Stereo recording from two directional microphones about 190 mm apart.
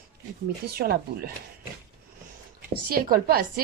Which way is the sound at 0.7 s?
55° right (ahead or behind).